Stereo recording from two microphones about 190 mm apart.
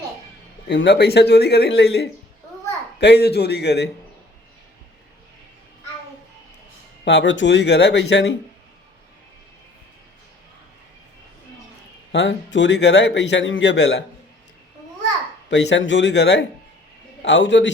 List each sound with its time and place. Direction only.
0.7 s a man's voice: 65° left (ahead or behind)
7.0 s a man's voice: 70° left (ahead or behind)
12.1 s a man's voice: 70° left (ahead or behind)
15.4 s a man's voice: 70° left (ahead or behind)